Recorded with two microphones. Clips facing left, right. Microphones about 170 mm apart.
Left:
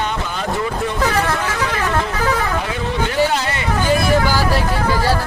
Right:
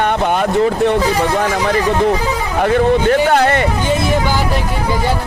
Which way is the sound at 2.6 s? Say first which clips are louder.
Right 10 dB; 55° right (ahead or behind).